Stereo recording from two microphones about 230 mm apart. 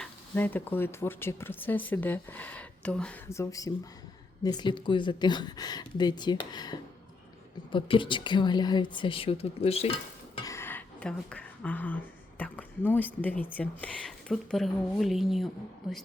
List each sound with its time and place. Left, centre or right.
0.0 s a woman's voice: centre